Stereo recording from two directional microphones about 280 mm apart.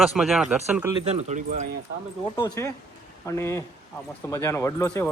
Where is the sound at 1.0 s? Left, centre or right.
Right.